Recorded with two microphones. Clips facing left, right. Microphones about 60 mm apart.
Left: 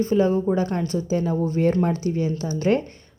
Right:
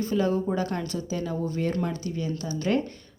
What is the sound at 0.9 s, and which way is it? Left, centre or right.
A woman's voice, left.